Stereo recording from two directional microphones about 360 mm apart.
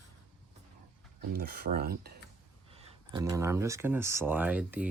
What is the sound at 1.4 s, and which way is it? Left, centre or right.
Speech, right.